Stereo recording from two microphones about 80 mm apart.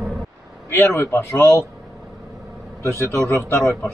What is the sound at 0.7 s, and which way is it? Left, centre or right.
Speech, left.